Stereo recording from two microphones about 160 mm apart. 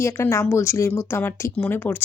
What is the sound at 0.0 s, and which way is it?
Speech, 15° left (ahead or behind).